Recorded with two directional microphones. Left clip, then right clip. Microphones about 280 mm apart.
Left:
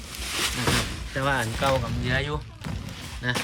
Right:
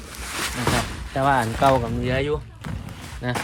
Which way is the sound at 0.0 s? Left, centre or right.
Centre.